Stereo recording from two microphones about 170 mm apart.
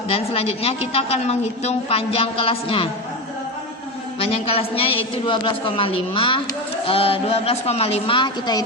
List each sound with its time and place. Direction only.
0.1 s a woman's voice: 35° left (ahead or behind)
4.2 s a woman's voice: 35° left (ahead or behind)